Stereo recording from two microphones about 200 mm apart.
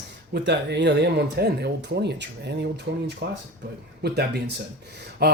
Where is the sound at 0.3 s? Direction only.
60° right (ahead or behind).